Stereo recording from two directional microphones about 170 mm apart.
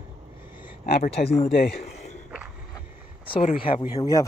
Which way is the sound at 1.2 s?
60° left (ahead or behind).